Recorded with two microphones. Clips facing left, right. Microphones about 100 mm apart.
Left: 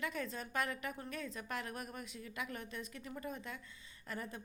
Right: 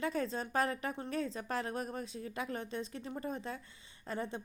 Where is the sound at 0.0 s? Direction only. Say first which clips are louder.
Right 6 dB; 35° right (ahead or behind).